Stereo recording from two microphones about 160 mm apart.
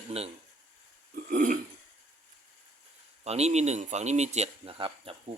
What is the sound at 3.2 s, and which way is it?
Speech, 40° right (ahead or behind).